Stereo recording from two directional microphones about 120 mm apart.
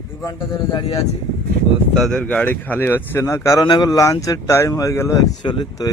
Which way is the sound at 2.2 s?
10° left (ahead or behind).